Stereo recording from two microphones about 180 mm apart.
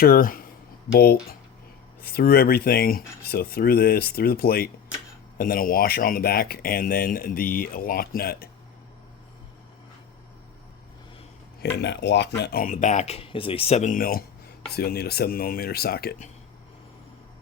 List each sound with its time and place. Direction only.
0.0 s speech: 55° left (ahead or behind)
11.6 s speech: 75° left (ahead or behind)